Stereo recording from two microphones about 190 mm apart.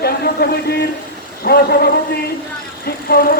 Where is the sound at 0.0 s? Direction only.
55° left (ahead or behind).